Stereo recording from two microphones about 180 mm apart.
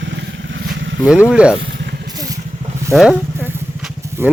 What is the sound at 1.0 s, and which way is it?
Speech, 5° right (ahead or behind).